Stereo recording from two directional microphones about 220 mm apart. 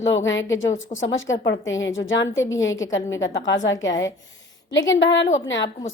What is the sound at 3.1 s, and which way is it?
Speech, 60° left (ahead or behind).